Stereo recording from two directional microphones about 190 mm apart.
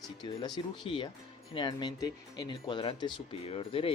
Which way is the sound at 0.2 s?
20° left (ahead or behind).